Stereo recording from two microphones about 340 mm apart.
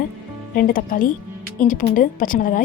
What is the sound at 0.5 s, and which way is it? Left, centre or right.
Speech, left.